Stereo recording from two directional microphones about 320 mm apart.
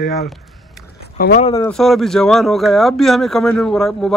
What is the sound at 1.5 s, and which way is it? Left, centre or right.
Speech, centre.